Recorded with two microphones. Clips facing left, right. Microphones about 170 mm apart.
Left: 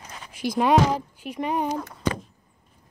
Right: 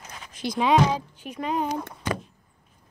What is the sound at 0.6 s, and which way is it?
Speech, 10° left (ahead or behind).